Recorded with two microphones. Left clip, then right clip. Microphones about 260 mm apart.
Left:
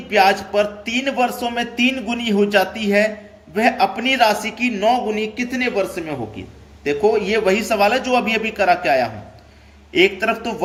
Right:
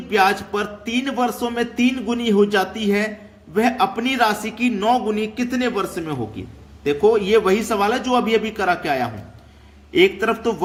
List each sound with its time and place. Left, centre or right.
0.1 s a man's voice: centre